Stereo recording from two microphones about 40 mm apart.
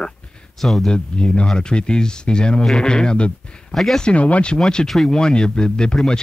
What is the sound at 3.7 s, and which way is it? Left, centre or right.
Speech, centre.